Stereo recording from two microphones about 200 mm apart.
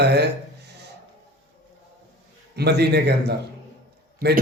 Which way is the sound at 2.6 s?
55° right (ahead or behind).